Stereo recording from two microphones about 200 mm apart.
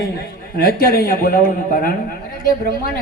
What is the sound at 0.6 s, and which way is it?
A man's voice, 50° left (ahead or behind).